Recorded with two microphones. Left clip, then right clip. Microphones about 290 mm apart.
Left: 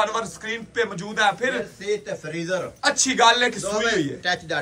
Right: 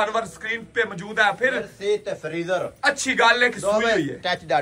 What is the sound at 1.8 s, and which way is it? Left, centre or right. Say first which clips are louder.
Speech: right 3 dB; centre.